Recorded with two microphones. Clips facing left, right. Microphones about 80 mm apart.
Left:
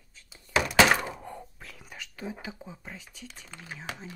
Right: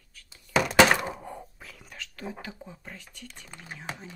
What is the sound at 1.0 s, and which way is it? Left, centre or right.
Whispering, centre.